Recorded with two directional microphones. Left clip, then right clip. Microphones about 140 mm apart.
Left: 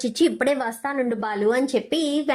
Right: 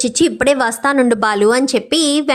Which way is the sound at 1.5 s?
35° right (ahead or behind).